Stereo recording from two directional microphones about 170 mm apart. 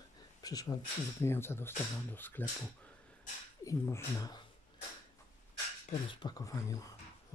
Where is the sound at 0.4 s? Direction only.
20° left (ahead or behind).